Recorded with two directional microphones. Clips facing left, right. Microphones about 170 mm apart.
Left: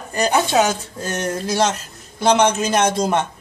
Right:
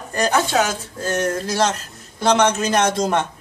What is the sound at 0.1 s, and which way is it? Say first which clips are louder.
Speech: left 1 dB; 10° left (ahead or behind).